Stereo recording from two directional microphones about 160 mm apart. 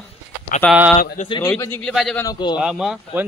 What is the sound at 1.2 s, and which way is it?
Speech, 30° left (ahead or behind).